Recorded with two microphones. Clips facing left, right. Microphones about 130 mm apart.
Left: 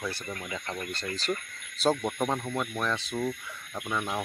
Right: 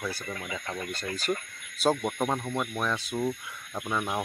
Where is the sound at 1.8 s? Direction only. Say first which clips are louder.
Even; 10° right (ahead or behind).